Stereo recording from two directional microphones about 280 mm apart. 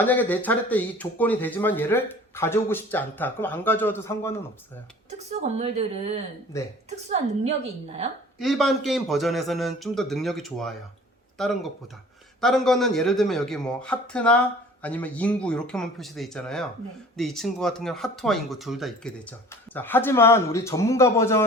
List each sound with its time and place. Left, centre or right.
0.0 s speech: centre
5.3 s speech: right
6.5 s speech: centre
7.1 s speech: right
8.4 s a man's voice: centre